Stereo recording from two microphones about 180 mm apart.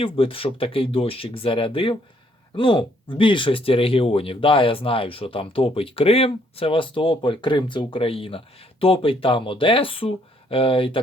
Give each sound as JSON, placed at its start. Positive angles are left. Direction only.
{"t": 0.0, "sound": "speech", "side_deg": 30}